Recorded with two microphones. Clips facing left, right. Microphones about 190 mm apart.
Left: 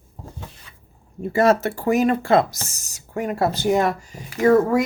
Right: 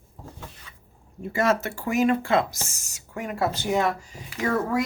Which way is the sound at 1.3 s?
35° left (ahead or behind).